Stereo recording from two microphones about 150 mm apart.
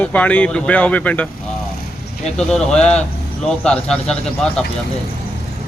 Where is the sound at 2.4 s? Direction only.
5° left (ahead or behind).